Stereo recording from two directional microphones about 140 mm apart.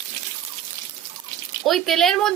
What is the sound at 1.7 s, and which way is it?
Speech, centre (ahead or behind).